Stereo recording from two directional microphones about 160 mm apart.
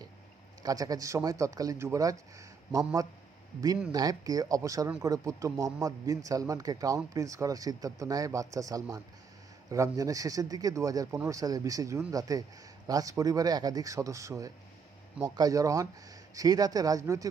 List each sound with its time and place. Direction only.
0.6 s a man's voice: 20° right (ahead or behind)